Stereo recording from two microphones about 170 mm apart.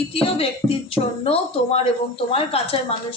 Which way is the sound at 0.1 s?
35° left (ahead or behind).